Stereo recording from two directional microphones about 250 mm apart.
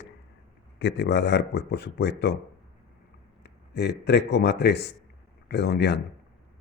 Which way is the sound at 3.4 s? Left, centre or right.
Left.